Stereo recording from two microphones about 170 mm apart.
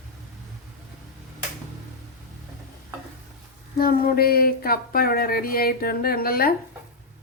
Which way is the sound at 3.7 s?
60° left (ahead or behind).